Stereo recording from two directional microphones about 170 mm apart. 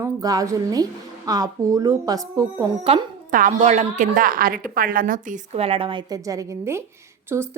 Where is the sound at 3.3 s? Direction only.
50° right (ahead or behind).